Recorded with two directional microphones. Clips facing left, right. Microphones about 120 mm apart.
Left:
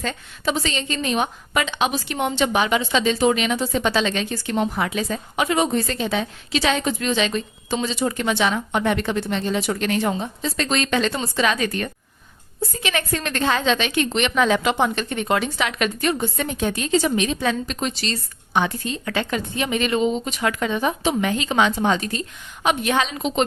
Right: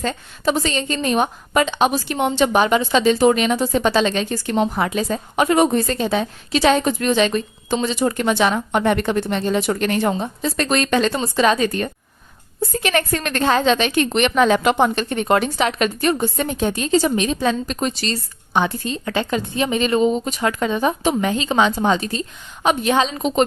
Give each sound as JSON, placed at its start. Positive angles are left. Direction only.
{"t": 0.0, "sound": "a woman's voice", "side_deg": -40}
{"t": 12.7, "sound": "a woman's voice", "side_deg": -45}
{"t": 21.2, "sound": "a woman's voice", "side_deg": -30}